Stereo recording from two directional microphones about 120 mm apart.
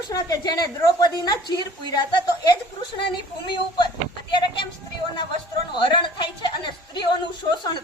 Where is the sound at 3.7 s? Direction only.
40° left (ahead or behind).